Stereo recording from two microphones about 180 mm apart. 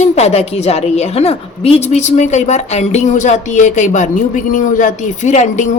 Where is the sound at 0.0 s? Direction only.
35° left (ahead or behind).